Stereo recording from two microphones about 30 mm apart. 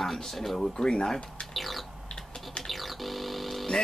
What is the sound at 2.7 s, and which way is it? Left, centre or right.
Synthesizer, centre.